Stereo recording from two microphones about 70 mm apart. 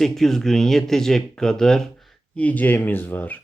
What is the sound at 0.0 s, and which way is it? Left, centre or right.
Speech, centre.